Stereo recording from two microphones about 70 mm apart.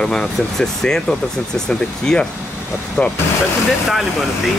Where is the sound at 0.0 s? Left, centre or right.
Centre.